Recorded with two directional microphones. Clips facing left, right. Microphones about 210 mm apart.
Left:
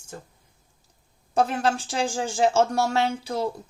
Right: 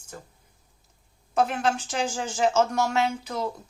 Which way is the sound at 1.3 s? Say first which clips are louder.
Left 1 dB; 35° left (ahead or behind).